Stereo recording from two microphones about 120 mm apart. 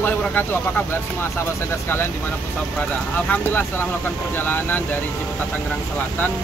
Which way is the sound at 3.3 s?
15° left (ahead or behind).